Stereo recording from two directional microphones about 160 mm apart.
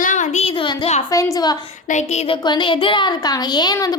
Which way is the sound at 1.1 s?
20° left (ahead or behind).